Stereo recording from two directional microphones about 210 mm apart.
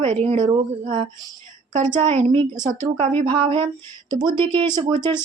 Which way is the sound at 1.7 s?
35° right (ahead or behind).